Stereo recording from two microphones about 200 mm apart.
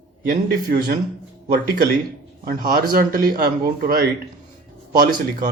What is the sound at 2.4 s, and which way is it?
Speech, 45° right (ahead or behind).